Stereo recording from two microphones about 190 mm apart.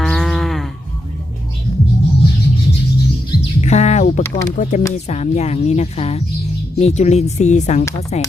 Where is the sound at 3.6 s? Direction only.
35° left (ahead or behind).